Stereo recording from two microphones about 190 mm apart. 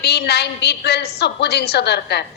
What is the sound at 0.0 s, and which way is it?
A woman's voice, 60° left (ahead or behind).